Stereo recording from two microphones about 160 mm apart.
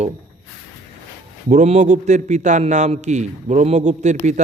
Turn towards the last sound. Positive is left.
turn(degrees=-45)  # may be behind; listen again after turning